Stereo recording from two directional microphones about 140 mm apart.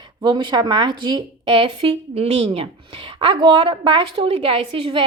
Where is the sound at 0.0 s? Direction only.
30° right (ahead or behind).